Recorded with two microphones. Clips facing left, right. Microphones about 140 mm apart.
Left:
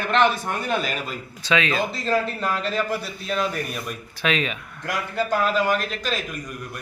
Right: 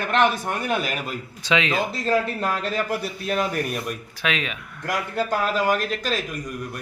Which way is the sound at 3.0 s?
50° right (ahead or behind).